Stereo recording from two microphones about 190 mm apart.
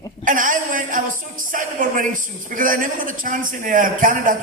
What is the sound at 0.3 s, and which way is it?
A man's voice, 45° right (ahead or behind).